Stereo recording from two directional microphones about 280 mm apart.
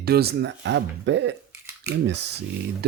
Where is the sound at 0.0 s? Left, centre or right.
Right.